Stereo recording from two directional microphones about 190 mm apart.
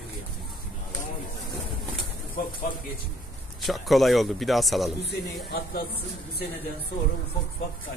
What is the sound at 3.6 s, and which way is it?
A man's voice, centre (ahead or behind).